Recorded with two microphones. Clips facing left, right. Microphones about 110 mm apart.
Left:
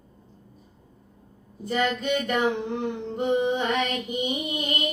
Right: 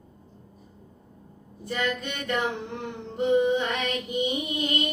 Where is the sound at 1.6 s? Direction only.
20° left (ahead or behind).